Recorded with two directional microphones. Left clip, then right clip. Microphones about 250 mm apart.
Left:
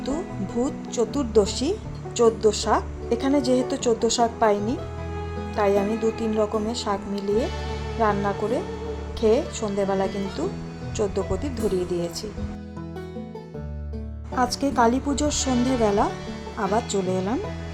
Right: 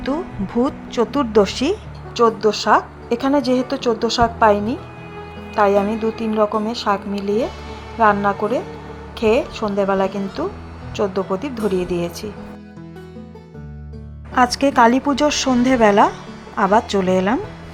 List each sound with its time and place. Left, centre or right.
0.6 s a woman's voice: centre
10.2 s a woman's voice: centre
14.3 s a woman's voice: centre